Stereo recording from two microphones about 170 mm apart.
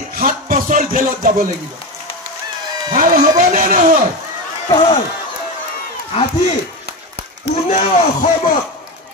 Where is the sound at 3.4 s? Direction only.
50° right (ahead or behind).